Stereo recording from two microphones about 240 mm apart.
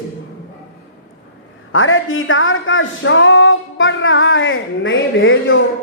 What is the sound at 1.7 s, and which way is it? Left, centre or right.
Speech, left.